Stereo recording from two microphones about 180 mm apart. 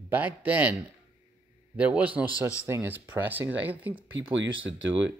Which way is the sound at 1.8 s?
10° right (ahead or behind).